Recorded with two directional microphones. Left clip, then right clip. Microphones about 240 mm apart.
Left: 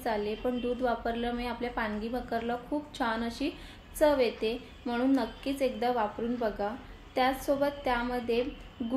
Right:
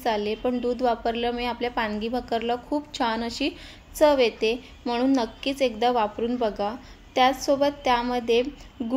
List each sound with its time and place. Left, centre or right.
0.0 s a woman's voice: right